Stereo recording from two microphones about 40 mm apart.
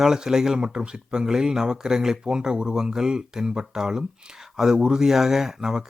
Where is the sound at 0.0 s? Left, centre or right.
Centre.